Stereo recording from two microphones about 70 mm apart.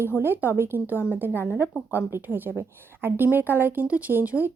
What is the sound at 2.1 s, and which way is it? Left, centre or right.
Speech, right.